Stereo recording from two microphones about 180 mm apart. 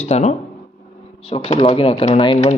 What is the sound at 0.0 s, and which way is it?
Speech, 40° left (ahead or behind).